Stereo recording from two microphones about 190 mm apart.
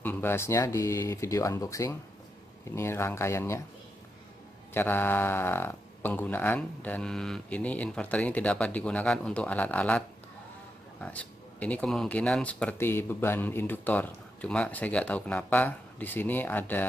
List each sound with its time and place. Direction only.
0.0 s speech: 10° left (ahead or behind)
4.7 s speech: 10° left (ahead or behind)